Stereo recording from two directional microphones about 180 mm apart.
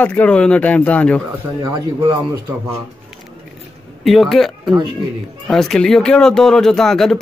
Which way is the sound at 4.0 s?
Centre (ahead or behind).